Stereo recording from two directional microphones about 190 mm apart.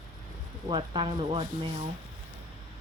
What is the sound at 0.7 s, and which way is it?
Speech, 25° right (ahead or behind).